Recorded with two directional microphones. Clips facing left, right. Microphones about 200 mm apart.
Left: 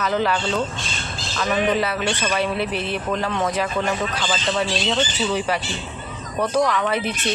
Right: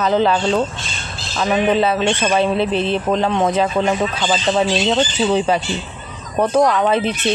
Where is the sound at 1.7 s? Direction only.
25° right (ahead or behind).